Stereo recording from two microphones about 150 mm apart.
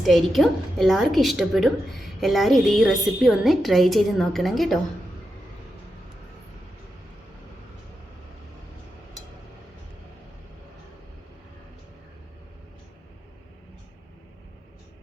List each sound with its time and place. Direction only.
0.0 s a woman's voice: centre (ahead or behind)